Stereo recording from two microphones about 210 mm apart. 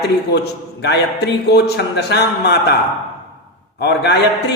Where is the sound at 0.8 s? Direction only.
55° left (ahead or behind).